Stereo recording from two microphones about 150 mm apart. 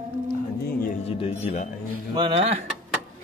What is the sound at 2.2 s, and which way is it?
Speech, 40° right (ahead or behind).